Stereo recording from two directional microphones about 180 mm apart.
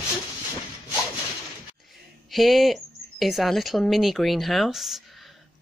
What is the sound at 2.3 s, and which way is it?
Speech, centre (ahead or behind).